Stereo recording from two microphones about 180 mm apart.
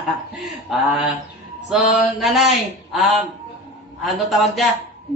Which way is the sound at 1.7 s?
Centre (ahead or behind).